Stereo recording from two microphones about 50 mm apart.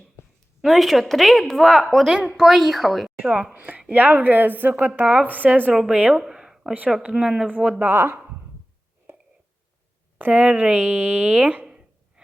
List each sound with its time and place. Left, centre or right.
0.6 s speech: centre
3.2 s speech: right
3.5 s a woman's voice: right
5.9 s speech: right
6.1 s a sound: centre
7.1 s speech: centre
7.4 s speech: right
7.8 s speech: right
10.2 s speech: right
10.4 s speech: right
11.6 s a sound: centre